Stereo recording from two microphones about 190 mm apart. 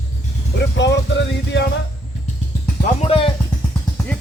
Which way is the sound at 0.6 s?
65° left (ahead or behind).